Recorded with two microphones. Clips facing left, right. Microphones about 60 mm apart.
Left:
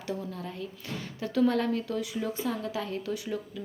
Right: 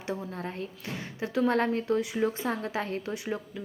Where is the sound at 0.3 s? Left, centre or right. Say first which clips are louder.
Right 2 dB; right.